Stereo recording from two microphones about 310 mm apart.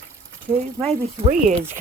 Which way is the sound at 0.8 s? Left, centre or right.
Right.